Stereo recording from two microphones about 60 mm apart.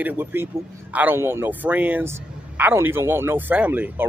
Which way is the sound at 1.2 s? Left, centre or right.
Right.